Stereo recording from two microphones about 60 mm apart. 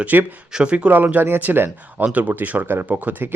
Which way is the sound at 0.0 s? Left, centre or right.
Right.